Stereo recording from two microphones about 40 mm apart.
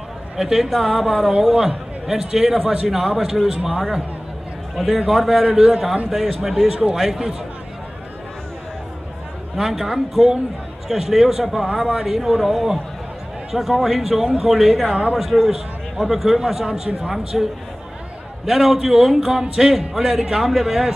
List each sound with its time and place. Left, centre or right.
0.4 s speech: centre
3.4 s speech: centre
4.8 s speech: centre
5.1 s speech: centre
5.5 s speech: centre
9.6 s speech: centre